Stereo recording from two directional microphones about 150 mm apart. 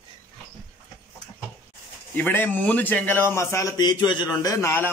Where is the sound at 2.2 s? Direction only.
10° left (ahead or behind).